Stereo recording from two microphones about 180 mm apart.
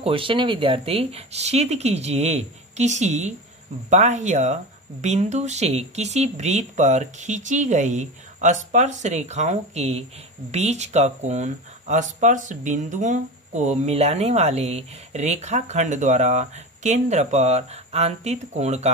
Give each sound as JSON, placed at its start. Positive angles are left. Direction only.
{"t": 0.0, "sound": "speech", "side_deg": -30}